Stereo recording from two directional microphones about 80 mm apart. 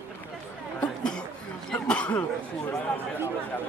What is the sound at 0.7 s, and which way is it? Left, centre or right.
Chatter, centre.